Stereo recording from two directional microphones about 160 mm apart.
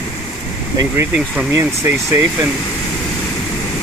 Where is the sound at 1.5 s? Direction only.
20° right (ahead or behind).